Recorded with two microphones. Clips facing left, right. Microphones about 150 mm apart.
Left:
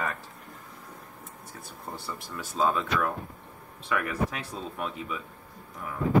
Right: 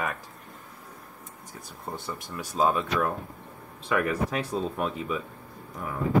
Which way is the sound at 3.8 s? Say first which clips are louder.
Right 3 dB; 30° right (ahead or behind).